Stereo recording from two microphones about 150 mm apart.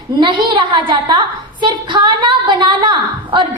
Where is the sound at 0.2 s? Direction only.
35° right (ahead or behind).